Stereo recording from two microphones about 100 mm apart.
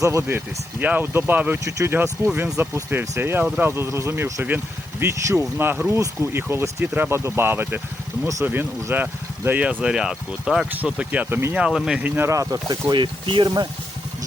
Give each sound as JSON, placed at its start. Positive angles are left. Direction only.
{"t": 0.0, "sound": "speech", "side_deg": -30}
{"t": 8.2, "sound": "speech", "side_deg": -30}
{"t": 8.4, "sound": "speech", "side_deg": -20}
{"t": 12.0, "sound": "speech", "side_deg": -20}
{"t": 12.3, "sound": "speech", "side_deg": -35}
{"t": 12.9, "sound": "speech", "side_deg": -55}